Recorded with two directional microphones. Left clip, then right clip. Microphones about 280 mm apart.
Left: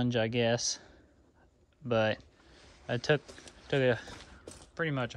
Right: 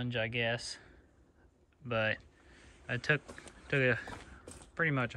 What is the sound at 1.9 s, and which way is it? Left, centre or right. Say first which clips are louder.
Speech: left 4 dB; centre.